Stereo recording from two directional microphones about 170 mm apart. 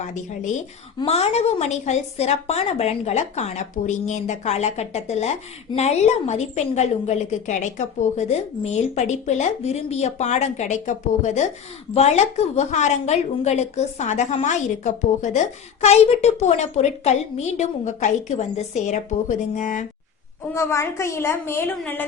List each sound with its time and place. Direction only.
0.0 s a woman's voice: 45° left (ahead or behind)
20.5 s a woman's voice: 15° left (ahead or behind)